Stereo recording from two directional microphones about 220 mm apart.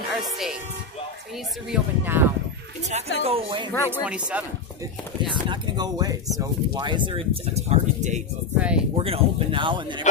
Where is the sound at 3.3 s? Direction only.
25° right (ahead or behind).